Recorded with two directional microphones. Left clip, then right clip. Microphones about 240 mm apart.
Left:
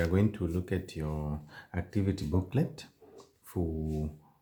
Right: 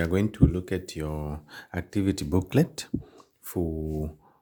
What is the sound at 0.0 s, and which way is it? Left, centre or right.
Speech, right.